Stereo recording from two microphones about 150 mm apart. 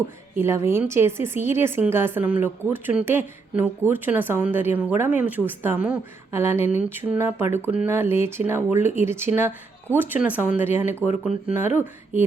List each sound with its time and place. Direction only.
0.3 s a woman's voice: 15° right (ahead or behind)